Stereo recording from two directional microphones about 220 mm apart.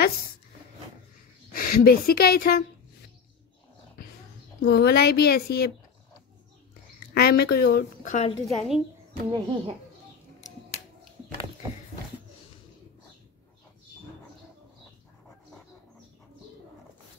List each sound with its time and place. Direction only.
1.5 s speech: 45° left (ahead or behind)
4.6 s a woman's voice: 50° left (ahead or behind)
7.2 s a woman's voice: 45° left (ahead or behind)
8.5 s a woman's voice: centre (ahead or behind)
9.3 s a child's voice: 25° right (ahead or behind)